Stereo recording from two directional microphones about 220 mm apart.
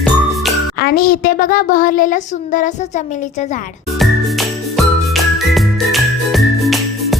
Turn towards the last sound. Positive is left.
turn(degrees=0)  # may be behind; listen again after turning